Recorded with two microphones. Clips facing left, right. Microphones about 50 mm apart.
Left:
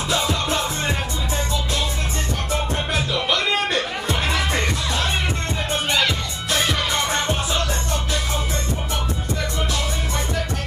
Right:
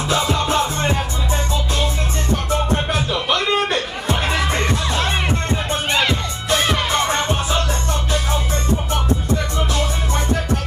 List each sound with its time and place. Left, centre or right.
0.1 s music: right
2.5 s music: right
5.7 s music: right